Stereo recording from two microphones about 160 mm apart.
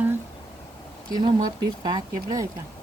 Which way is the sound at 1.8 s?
25° right (ahead or behind).